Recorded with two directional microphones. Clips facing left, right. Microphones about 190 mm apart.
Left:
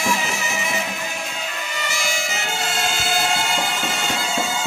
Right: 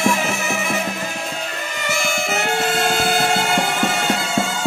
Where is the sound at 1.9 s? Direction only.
55° right (ahead or behind).